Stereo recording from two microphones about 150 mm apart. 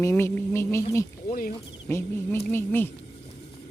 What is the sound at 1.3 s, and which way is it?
Speech, 75° left (ahead or behind).